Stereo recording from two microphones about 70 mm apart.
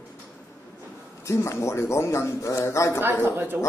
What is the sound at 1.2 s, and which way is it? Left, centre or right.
A man's voice, left.